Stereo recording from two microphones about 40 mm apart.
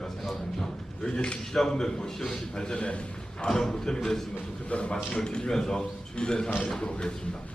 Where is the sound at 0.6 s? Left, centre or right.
Centre.